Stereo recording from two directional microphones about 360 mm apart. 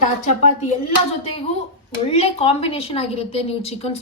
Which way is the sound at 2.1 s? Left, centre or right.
Centre.